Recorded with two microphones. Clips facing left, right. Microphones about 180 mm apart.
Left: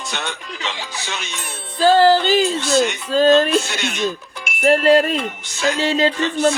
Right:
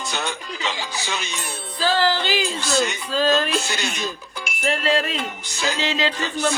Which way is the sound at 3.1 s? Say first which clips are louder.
Left 8 dB; 45° left (ahead or behind).